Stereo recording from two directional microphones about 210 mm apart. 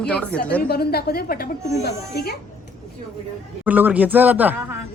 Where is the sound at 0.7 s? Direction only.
50° left (ahead or behind).